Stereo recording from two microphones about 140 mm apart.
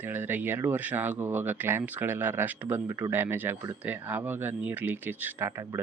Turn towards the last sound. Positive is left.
turn(degrees=-15)  # may be behind; listen again after turning